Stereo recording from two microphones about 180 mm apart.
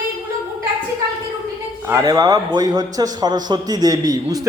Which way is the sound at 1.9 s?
20° right (ahead or behind).